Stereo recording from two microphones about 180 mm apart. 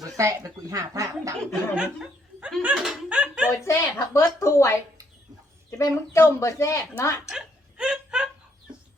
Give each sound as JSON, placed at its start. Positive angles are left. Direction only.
{"t": 0.2, "sound": "speech", "side_deg": -15}
{"t": 1.7, "sound": "speech", "side_deg": -5}
{"t": 3.5, "sound": "speech", "side_deg": 15}
{"t": 5.7, "sound": "speech", "side_deg": 15}
{"t": 7.3, "sound": "laughter", "side_deg": -5}